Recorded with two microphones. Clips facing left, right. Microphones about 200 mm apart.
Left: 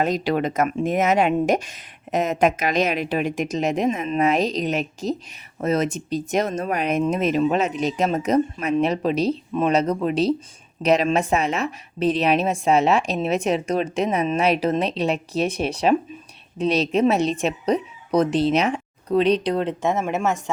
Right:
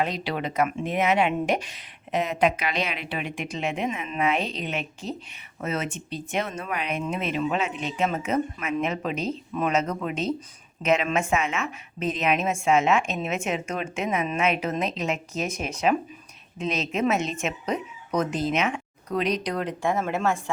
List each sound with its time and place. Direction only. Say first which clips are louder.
0.0 s a woman's voice: left 6 dB; 45° left (ahead or behind); by 20.4 s 20° left (ahead or behind)